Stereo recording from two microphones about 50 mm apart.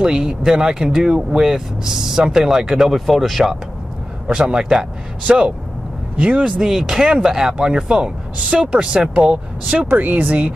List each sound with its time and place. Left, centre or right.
0.0 s speech: centre
4.3 s speech: centre
9.8 s speech: right